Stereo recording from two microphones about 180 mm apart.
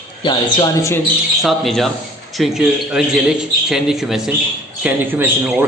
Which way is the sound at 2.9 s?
Centre (ahead or behind).